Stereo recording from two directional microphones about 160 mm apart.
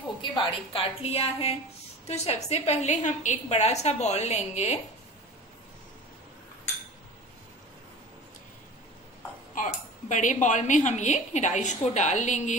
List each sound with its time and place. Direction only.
0.2 s a woman's voice: 35° left (ahead or behind)
9.6 s a woman's voice: 50° left (ahead or behind)